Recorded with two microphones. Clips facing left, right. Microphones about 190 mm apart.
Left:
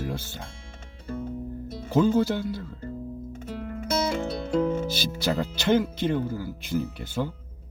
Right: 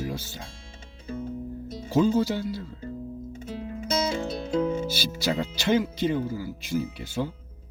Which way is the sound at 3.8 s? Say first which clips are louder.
Left 1 dB; 20° right (ahead or behind).